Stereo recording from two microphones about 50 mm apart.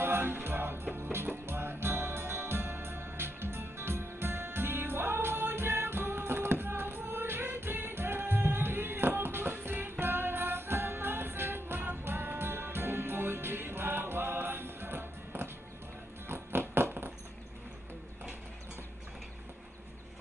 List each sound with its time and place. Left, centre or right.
0.0 s music: right